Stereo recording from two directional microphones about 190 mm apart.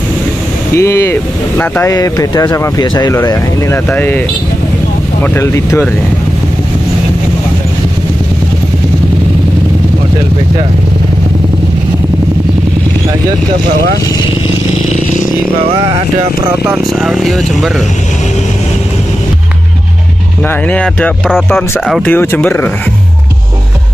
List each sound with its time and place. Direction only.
0.7 s speech: 15° left (ahead or behind)
3.3 s speech: 10° left (ahead or behind)
5.2 s speech: 15° left (ahead or behind)
16.4 s speech: 15° right (ahead or behind)
17.0 s speech: centre (ahead or behind)
20.4 s speech: 5° left (ahead or behind)